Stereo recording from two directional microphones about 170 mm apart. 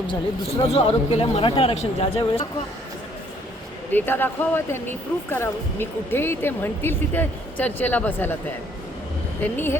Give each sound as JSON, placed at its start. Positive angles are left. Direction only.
{"t": 0.7, "sound": "speech", "side_deg": 35}
{"t": 3.9, "sound": "speech", "side_deg": 10}
{"t": 9.4, "sound": "speech", "side_deg": 10}